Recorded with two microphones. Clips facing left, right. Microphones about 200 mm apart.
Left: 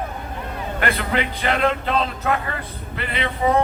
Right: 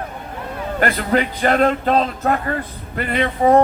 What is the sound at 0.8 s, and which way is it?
A man's voice, 40° right (ahead or behind).